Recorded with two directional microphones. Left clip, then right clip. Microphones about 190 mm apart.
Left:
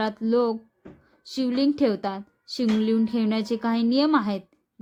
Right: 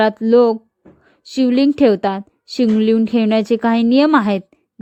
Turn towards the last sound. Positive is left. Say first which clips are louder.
# right 9 dB
turn(degrees=-40)  # may be behind; listen again after turning